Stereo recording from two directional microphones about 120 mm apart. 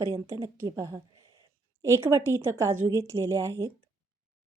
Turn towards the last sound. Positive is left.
turn(degrees=-25)  # may be behind; listen again after turning